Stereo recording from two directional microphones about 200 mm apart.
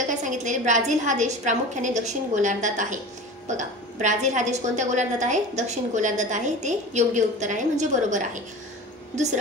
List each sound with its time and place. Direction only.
0.1 s a woman's voice: 40° right (ahead or behind)